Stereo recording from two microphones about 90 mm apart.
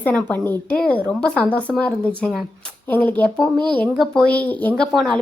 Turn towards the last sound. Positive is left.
turn(degrees=5)  # may be behind; listen again after turning